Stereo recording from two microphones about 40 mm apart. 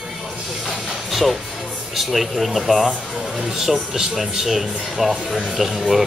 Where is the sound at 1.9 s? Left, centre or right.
Centre.